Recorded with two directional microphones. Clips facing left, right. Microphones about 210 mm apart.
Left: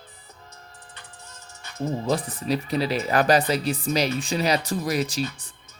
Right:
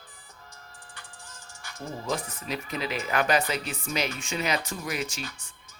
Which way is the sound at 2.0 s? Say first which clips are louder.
Left 5 dB; 35° left (ahead or behind).